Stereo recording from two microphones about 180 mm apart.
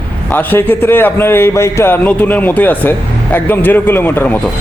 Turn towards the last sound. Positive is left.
turn(degrees=10)  # may be behind; listen again after turning